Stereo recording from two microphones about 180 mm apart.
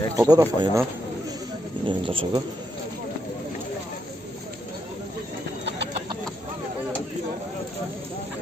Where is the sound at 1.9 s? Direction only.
25° right (ahead or behind).